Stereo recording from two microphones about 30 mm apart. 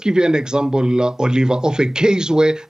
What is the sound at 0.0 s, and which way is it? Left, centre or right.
Speech, right.